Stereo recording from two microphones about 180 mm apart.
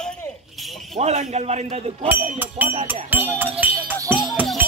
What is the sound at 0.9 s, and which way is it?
Speech, 35° right (ahead or behind).